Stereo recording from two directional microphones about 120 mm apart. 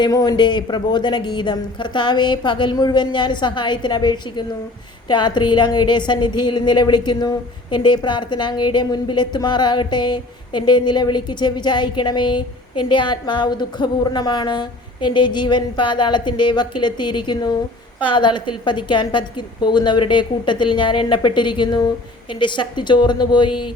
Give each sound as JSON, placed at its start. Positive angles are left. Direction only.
{"t": 0.0, "sound": "a woman's voice", "side_deg": 30}